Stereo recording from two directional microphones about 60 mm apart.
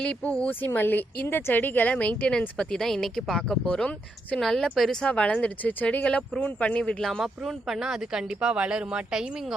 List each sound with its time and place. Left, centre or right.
0.0 s speech: centre
0.6 s speech: left
2.6 s a woman's voice: centre
7.2 s speech: centre